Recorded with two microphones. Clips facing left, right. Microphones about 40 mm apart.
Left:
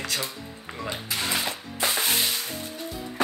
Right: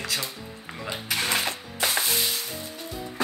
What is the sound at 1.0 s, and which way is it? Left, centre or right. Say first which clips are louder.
Music: right 3 dB; right.